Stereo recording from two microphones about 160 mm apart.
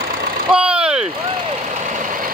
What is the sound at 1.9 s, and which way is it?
Vehicle, 55° right (ahead or behind).